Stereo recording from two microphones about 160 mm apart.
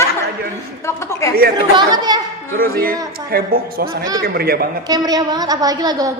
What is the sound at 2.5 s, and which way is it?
Speech, 65° right (ahead or behind).